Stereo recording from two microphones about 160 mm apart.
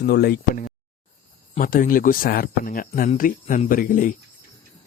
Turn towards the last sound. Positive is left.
turn(degrees=55)  # may be behind; listen again after turning